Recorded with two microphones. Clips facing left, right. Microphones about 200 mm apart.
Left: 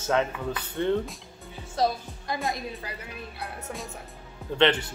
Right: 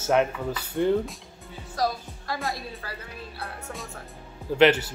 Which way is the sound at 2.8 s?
20° left (ahead or behind).